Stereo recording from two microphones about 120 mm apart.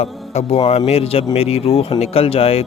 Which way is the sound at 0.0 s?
60° left (ahead or behind).